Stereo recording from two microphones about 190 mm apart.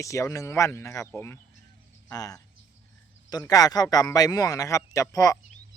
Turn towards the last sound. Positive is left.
turn(degrees=15)  # may be behind; listen again after turning